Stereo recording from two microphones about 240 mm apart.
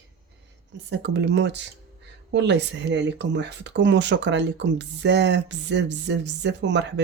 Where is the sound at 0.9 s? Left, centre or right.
Right.